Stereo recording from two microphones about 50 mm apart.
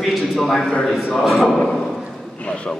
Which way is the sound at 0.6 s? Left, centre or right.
Left.